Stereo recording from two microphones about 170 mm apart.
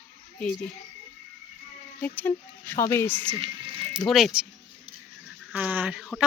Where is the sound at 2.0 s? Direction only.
10° left (ahead or behind).